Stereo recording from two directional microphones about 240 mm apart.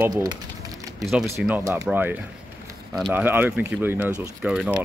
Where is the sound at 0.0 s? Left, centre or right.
Centre.